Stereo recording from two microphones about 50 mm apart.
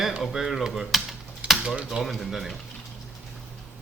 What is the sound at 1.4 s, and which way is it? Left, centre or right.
Typewriter, right.